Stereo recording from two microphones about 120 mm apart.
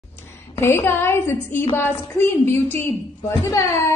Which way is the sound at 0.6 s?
20° left (ahead or behind).